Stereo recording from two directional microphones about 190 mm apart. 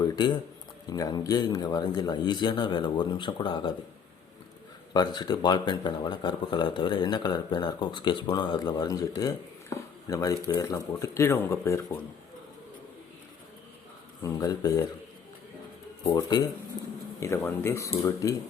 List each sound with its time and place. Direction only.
0.0 s speech: 20° left (ahead or behind)
4.9 s speech: 20° left (ahead or behind)
14.3 s speech: 20° left (ahead or behind)
16.1 s speech: 20° left (ahead or behind)